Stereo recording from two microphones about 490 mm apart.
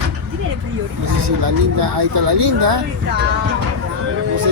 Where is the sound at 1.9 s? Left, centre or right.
Right.